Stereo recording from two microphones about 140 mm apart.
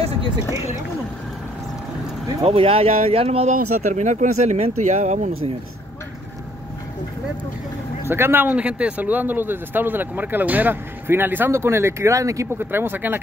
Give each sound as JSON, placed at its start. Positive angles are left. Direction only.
{"t": 2.4, "sound": "speech", "side_deg": -40}
{"t": 3.9, "sound": "speech", "side_deg": -60}
{"t": 8.1, "sound": "speech", "side_deg": -15}